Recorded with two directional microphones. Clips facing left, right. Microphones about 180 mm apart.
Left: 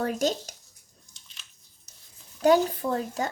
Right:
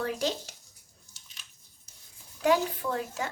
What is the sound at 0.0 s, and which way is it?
Speech, 45° left (ahead or behind).